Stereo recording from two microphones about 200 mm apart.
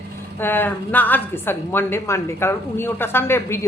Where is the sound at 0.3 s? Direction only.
10° left (ahead or behind).